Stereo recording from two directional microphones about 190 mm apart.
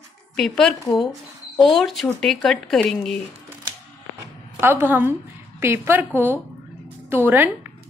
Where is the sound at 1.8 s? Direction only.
Centre (ahead or behind).